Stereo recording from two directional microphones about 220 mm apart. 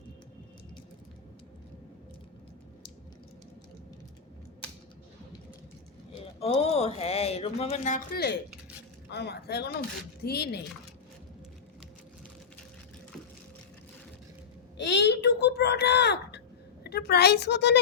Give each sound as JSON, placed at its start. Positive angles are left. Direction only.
{"t": 6.4, "sound": "speech", "side_deg": 30}
{"t": 8.1, "sound": "speech", "side_deg": 45}
{"t": 14.8, "sound": "a sound", "side_deg": 50}